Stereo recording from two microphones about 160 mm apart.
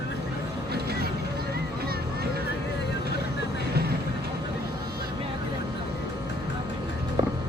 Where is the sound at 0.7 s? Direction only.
85° right.